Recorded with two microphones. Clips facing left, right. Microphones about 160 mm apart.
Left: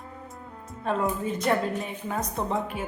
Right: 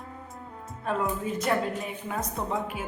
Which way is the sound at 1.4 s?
Centre (ahead or behind).